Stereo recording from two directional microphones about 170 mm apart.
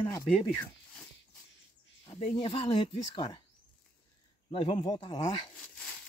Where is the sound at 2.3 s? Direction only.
30° left (ahead or behind).